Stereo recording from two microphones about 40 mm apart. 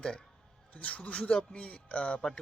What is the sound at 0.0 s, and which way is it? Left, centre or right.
Speech, left.